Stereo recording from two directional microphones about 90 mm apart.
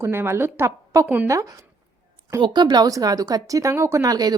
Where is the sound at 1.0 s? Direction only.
15° right (ahead or behind).